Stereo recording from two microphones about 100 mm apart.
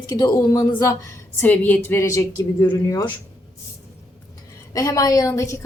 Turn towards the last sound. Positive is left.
turn(degrees=35)  # may be behind; listen again after turning